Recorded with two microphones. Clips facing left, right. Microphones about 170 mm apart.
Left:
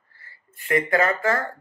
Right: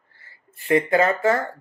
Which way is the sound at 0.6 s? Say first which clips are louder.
Right 3 dB; 25° right (ahead or behind).